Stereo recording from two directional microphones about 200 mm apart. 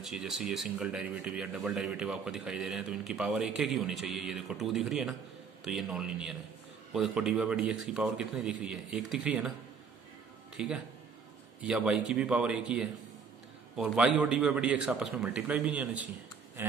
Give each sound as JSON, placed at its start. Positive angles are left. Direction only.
{"t": 0.0, "sound": "speech", "side_deg": 0}
{"t": 10.5, "sound": "speech", "side_deg": -5}